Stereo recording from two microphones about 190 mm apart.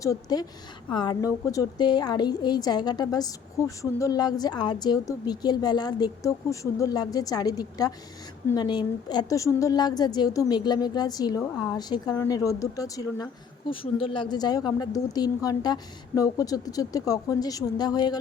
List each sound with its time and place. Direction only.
0.0 s a woman's voice: 20° left (ahead or behind)